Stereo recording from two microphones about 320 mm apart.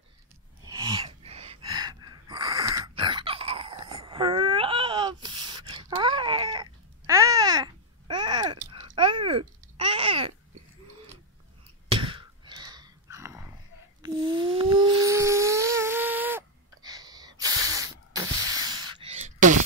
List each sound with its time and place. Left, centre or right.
0.7 s gasp: centre
8.5 s babbling: centre
11.9 s sigh: centre
14.0 s a sound: centre